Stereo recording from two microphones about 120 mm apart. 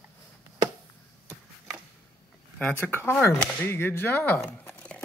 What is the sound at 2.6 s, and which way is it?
Speech, 15° left (ahead or behind).